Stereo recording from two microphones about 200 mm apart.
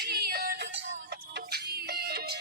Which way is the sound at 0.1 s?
50° right (ahead or behind).